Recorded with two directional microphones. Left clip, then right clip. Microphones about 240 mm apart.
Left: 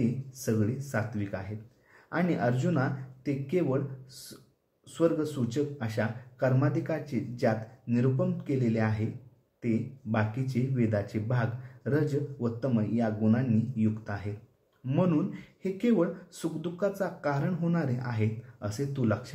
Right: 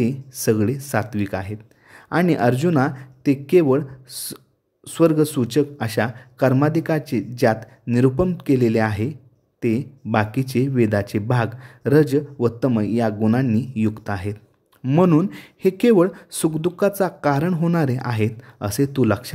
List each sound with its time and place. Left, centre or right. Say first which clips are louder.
0.0 s speech: right 11 dB; right
4.9 s speech: right 11 dB; right